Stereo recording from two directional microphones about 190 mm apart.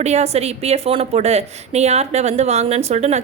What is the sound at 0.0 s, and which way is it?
A woman's voice, 35° right (ahead or behind).